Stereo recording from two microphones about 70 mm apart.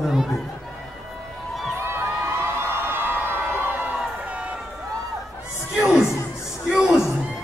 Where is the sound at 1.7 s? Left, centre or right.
Right.